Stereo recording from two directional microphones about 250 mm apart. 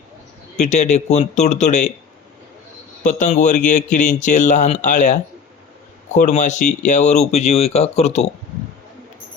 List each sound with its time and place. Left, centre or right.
0.5 s speech: left
3.0 s speech: left